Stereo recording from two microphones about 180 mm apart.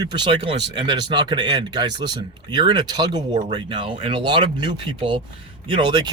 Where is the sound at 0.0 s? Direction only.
25° right (ahead or behind).